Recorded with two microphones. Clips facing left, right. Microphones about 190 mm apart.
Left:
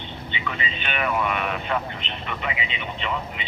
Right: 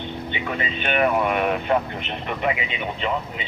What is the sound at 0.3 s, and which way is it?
Speech, 50° right (ahead or behind).